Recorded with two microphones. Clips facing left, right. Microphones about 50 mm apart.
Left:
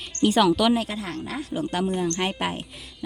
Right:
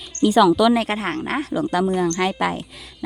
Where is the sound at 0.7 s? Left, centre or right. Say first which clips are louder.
Right 5 dB; right.